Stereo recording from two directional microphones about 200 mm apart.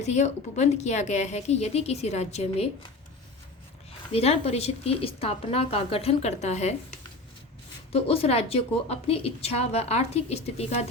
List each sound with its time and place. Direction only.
0.0 s a woman's voice: 35° left (ahead or behind)
4.1 s a woman's voice: 30° left (ahead or behind)
7.9 s a woman's voice: 30° left (ahead or behind)